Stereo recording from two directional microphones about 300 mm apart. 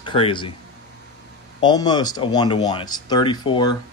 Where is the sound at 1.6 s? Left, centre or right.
Centre.